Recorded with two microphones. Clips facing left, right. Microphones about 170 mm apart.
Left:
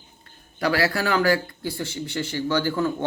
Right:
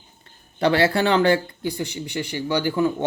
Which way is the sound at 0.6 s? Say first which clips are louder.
Right 4 dB; 25° right (ahead or behind).